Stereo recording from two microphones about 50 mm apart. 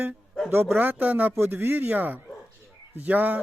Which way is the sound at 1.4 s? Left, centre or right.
Right.